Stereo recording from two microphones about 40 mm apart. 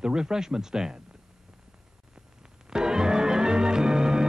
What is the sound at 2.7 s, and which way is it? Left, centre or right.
Music, centre.